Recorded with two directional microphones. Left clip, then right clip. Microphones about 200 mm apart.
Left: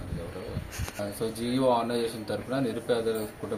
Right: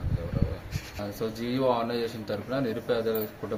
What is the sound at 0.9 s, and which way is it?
A man's voice, centre (ahead or behind).